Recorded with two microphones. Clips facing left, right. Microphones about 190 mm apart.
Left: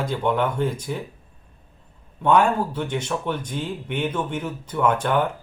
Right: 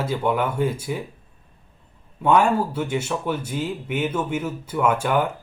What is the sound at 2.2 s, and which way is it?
Speech, 5° right (ahead or behind).